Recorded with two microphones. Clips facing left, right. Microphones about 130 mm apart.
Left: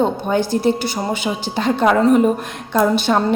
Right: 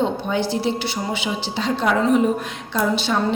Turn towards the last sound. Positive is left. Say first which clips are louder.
# left 5 dB
turn(degrees=50)  # may be behind; listen again after turning